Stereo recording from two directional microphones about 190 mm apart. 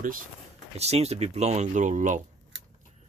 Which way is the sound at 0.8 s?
35° right (ahead or behind).